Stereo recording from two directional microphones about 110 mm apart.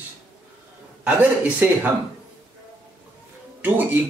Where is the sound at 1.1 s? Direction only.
15° right (ahead or behind).